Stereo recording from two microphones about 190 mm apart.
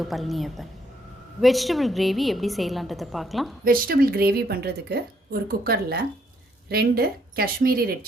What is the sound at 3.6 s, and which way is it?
A woman's voice, 50° right (ahead or behind).